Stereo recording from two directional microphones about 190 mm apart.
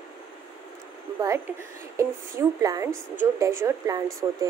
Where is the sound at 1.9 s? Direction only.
15° right (ahead or behind).